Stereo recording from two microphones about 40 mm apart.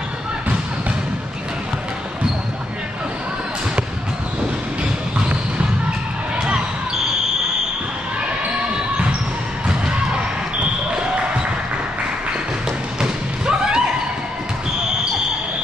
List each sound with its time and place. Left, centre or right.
13.0 s thump: centre